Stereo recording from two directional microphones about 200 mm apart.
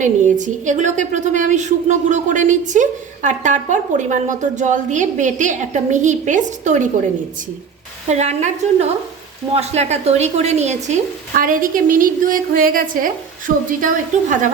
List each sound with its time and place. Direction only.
0.0 s a woman's voice: 40° right (ahead or behind)
8.1 s a woman's voice: 35° right (ahead or behind)